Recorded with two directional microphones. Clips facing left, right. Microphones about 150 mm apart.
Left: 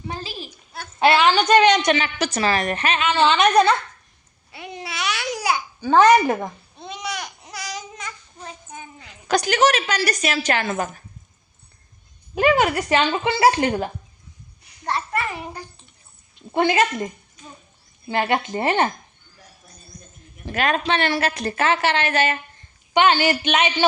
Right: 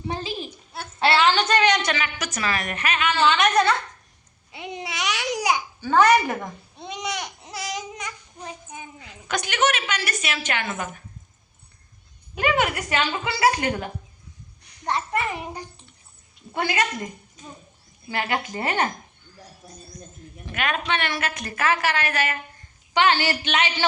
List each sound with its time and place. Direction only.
0.1 s a sound: 20° right (ahead or behind)
0.9 s a woman's voice: 15° left (ahead or behind)
4.5 s babbling: 20° right (ahead or behind)
5.8 s a woman's voice: 20° left (ahead or behind)
6.7 s babbling: 15° right (ahead or behind)
9.2 s speech: 35° left (ahead or behind)
12.3 s a woman's voice: 30° left (ahead or behind)
14.8 s a child's voice: 20° right (ahead or behind)
16.3 s speech: 25° left (ahead or behind)
18.1 s a woman's voice: 25° left (ahead or behind)
20.4 s a woman's voice: 35° left (ahead or behind)